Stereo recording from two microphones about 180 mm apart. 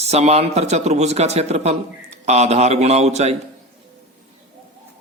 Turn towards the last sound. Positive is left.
turn(degrees=-35)  # may be behind; listen again after turning